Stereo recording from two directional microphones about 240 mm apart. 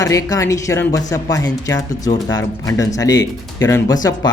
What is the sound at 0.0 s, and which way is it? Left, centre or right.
Speech, centre.